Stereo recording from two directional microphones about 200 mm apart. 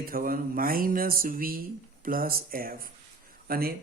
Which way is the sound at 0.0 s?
45° right (ahead or behind).